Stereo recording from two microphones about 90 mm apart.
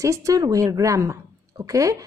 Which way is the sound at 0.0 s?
40° right (ahead or behind).